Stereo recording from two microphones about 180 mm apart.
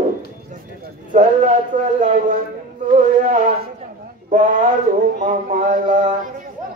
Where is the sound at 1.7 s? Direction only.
45° right (ahead or behind).